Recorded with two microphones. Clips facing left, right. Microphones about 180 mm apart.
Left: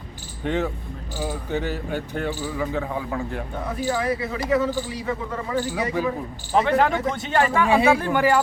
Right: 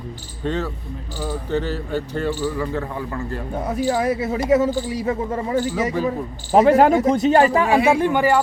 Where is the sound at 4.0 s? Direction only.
45° right (ahead or behind).